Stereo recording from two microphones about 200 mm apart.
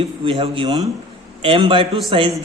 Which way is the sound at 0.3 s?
30° right (ahead or behind).